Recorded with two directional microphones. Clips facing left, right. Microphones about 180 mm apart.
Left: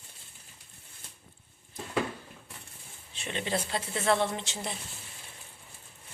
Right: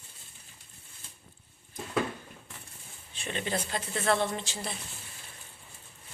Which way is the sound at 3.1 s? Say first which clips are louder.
Left 1 dB; 25° left (ahead or behind).